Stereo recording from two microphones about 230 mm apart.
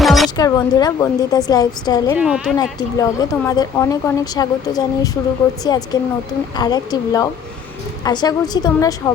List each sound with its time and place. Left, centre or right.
0.0 s a sound: centre
0.3 s speech: centre
2.1 s speech: centre
2.6 s speech: centre